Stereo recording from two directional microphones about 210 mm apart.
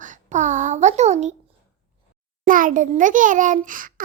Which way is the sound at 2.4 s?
40° right (ahead or behind).